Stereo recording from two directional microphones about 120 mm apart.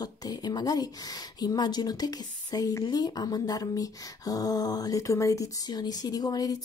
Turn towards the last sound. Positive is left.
turn(degrees=35)  # may be behind; listen again after turning